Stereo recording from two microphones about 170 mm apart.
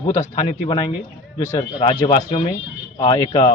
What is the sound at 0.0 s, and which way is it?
Speech, 20° left (ahead or behind).